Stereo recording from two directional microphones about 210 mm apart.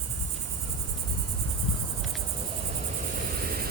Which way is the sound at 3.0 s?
40° right (ahead or behind).